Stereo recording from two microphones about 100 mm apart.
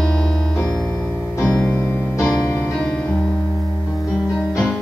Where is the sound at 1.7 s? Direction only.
20° left (ahead or behind).